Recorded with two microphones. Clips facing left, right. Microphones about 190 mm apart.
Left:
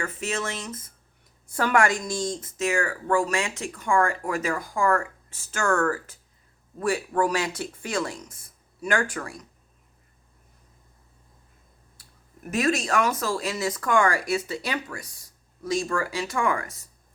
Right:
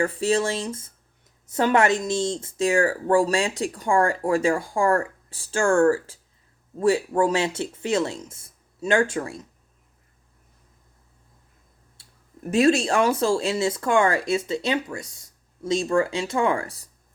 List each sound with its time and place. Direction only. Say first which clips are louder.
0.0 s speech: right 8 dB; 35° right (ahead or behind)
12.0 s a sound: even; 25° right (ahead or behind)
12.5 s speech: right 6 dB; 30° right (ahead or behind)